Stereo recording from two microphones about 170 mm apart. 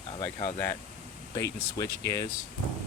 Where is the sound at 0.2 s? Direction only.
40° left (ahead or behind).